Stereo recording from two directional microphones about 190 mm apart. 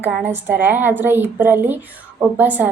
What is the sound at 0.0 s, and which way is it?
A woman's voice, 10° right (ahead or behind).